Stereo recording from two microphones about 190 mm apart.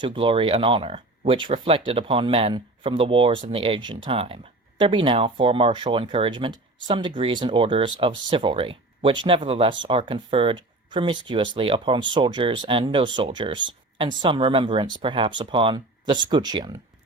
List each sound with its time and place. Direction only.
0.0 s speech: 25° right (ahead or behind)